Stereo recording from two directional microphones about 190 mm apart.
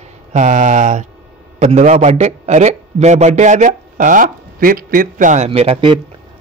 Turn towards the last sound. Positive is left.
turn(degrees=-25)  # may be behind; listen again after turning